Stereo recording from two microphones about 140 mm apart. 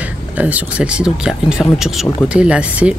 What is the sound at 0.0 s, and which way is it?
Speech, 10° right (ahead or behind).